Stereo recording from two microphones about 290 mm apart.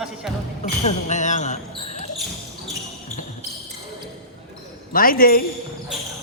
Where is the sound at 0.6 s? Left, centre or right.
Left.